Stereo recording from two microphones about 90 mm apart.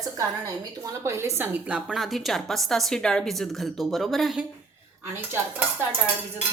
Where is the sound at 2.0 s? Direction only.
Centre (ahead or behind).